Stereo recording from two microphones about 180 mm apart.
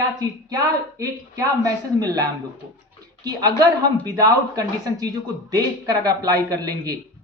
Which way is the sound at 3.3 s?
20° right (ahead or behind).